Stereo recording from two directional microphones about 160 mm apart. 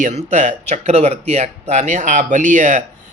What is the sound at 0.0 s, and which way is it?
A man's voice, 45° right (ahead or behind).